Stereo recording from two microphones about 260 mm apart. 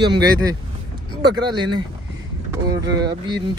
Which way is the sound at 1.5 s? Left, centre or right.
Centre.